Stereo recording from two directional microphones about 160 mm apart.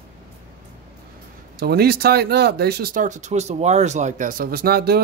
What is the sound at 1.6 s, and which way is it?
Speech, 85° right.